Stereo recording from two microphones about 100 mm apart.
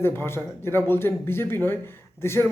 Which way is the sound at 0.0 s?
25° left (ahead or behind).